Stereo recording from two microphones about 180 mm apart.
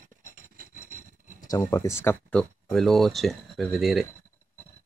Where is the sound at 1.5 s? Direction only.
20° left (ahead or behind); by 4.0 s centre (ahead or behind).